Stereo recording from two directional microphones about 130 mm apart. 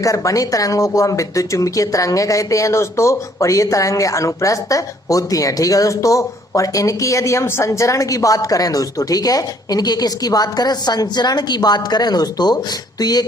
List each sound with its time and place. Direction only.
0.0 s speech: 25° left (ahead or behind)